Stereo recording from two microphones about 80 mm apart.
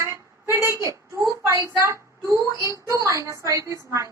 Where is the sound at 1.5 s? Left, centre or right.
Right.